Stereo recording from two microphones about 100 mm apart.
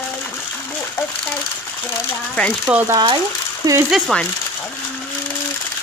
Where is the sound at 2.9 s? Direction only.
50° right (ahead or behind).